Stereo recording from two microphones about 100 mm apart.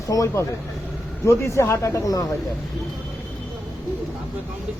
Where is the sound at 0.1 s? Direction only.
35° left (ahead or behind).